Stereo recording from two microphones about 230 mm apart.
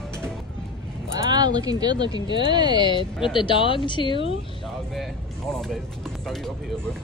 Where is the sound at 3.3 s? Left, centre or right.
Left.